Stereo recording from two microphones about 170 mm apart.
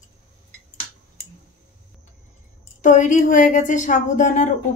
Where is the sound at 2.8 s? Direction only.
50° left (ahead or behind).